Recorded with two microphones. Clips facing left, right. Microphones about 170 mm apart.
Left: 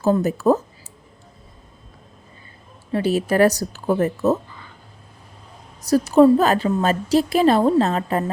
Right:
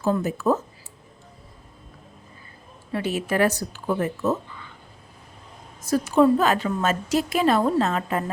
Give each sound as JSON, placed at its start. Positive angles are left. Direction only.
{"t": 0.0, "sound": "a woman's voice", "side_deg": 40}
{"t": 2.9, "sound": "a woman's voice", "side_deg": 35}
{"t": 5.8, "sound": "a woman's voice", "side_deg": 35}